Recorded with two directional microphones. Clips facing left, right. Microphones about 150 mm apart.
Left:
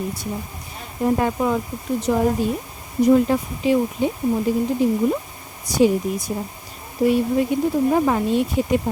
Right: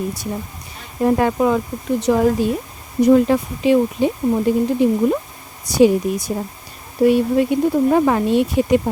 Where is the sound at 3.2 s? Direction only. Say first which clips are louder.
Right 4 dB; 75° right (ahead or behind).